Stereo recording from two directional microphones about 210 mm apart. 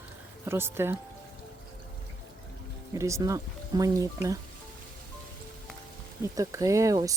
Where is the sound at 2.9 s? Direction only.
15° right (ahead or behind).